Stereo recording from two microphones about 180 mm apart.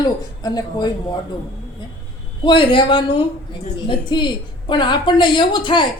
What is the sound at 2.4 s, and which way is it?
A woman's voice, 25° left (ahead or behind).